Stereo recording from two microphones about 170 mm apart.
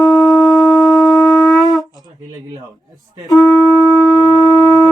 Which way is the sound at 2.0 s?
25° right (ahead or behind).